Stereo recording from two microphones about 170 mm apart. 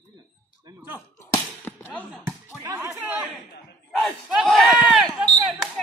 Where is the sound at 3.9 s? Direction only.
Centre (ahead or behind).